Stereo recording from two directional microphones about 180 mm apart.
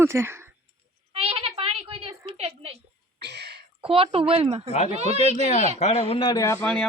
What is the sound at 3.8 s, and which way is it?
Speech, 30° right (ahead or behind).